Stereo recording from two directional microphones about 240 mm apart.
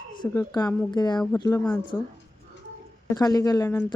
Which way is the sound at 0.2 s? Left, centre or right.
Centre.